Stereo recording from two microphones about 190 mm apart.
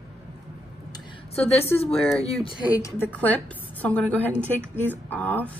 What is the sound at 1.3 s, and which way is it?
A woman's voice, 30° left (ahead or behind).